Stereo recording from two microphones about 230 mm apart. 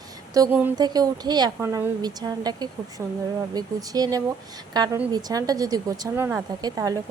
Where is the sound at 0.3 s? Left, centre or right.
Centre.